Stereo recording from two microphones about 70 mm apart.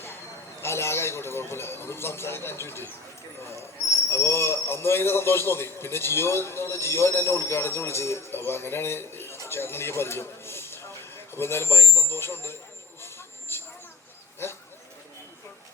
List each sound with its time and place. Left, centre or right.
0.6 s a man's voice: left
4.1 s a man's voice: left
13.0 s vehicle: left